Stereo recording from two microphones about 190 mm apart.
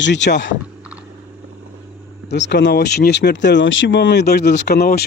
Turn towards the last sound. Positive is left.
turn(degrees=60)  # may be behind; listen again after turning